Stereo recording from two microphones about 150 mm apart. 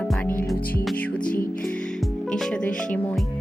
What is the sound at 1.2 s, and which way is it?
Music, 70° left (ahead or behind).